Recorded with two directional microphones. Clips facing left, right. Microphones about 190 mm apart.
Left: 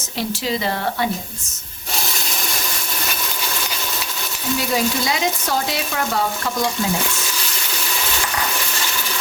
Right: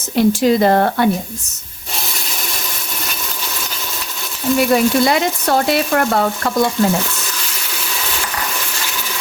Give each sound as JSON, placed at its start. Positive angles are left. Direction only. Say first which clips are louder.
{"t": 0.2, "sound": "speech", "louder": "right 11 dB", "side_deg": -50}
{"t": 4.5, "sound": "frying", "louder": "right 8 dB", "side_deg": -60}